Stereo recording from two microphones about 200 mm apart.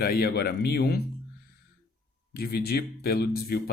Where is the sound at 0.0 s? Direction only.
50° left (ahead or behind).